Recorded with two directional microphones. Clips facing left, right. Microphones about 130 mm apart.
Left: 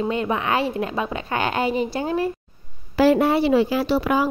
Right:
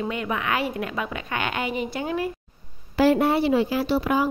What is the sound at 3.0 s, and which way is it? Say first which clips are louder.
A woman's voice: left 2 dB; 90° left.